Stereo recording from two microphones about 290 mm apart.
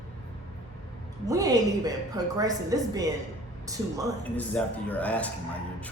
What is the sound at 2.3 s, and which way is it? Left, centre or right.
Speech, centre.